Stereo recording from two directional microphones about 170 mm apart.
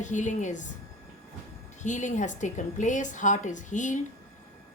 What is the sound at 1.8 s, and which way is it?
A woman's voice, 45° left (ahead or behind).